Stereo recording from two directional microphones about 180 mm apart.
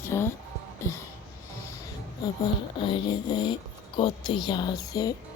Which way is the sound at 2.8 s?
25° left (ahead or behind).